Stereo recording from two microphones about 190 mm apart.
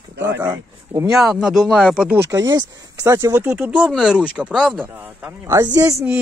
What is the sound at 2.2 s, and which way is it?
Speech, 20° right (ahead or behind).